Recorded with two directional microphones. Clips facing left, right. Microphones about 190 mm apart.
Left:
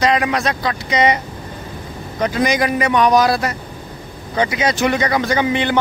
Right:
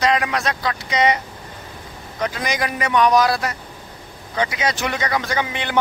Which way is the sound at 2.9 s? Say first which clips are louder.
Left 1 dB; 35° left (ahead or behind).